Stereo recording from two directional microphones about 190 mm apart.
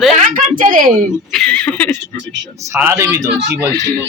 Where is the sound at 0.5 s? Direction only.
45° right (ahead or behind).